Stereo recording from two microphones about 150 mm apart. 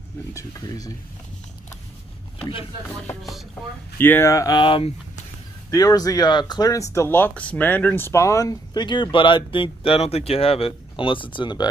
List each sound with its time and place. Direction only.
0.3 s speech: 20° left (ahead or behind)
4.0 s speech: 15° left (ahead or behind); by 4.9 s 35° left (ahead or behind)
5.7 s speech: 25° left (ahead or behind)